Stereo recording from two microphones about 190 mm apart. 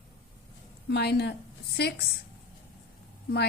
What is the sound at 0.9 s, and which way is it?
A woman's voice, 60° left (ahead or behind).